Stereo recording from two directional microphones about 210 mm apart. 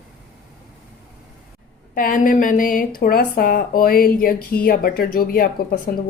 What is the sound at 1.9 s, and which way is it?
A woman's voice, 40° left (ahead or behind).